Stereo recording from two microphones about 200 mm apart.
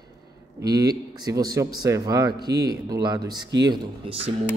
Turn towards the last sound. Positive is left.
turn(degrees=-25)  # may be behind; listen again after turning